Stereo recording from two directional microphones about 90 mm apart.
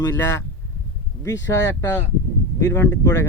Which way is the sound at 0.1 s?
30° left (ahead or behind).